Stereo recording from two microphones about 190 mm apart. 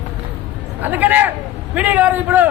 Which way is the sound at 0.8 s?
10° right (ahead or behind).